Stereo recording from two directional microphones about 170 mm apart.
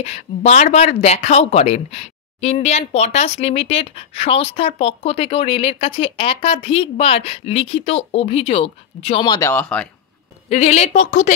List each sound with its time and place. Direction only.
0.0 s speech: 40° left (ahead or behind)
9.2 s speech: 25° left (ahead or behind)
9.5 s speech: 5° left (ahead or behind)
10.5 s a woman's voice: 40° left (ahead or behind)